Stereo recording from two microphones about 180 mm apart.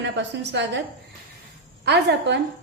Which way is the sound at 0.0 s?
75° right (ahead or behind).